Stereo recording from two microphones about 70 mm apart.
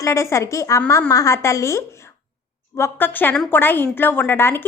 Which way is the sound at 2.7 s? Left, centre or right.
Left.